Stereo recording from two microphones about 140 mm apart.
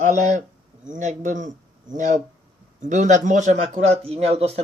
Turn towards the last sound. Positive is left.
turn(degrees=-45)  # may be behind; listen again after turning